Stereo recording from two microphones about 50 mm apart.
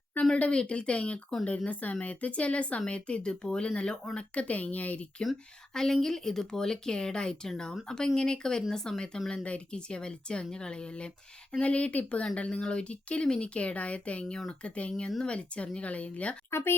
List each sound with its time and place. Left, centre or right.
0.3 s speech: left
5.2 s speech: centre; by 14.3 s left
14.3 s speech: centre
16.5 s speech: left